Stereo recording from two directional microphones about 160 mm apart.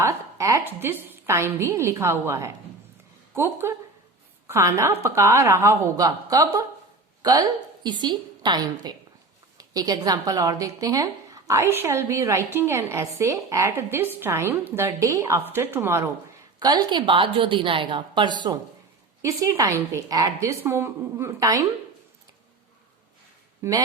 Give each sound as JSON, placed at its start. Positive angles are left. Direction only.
{"t": 0.0, "sound": "a woman's voice", "side_deg": -20}
{"t": 16.6, "sound": "a woman's voice", "side_deg": -25}
{"t": 23.6, "sound": "a woman's voice", "side_deg": -20}